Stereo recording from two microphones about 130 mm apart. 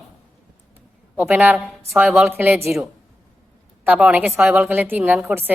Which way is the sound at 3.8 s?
10° right (ahead or behind).